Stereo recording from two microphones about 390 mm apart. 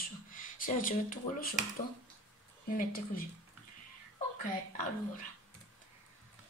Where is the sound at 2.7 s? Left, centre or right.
Left.